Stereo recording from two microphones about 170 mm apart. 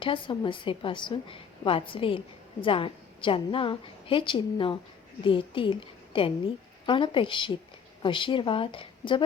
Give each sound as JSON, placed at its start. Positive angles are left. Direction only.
{"t": 0.0, "sound": "a woman's voice", "side_deg": 30}